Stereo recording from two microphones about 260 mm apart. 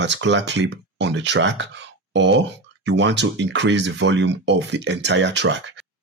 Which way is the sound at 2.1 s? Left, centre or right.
Right.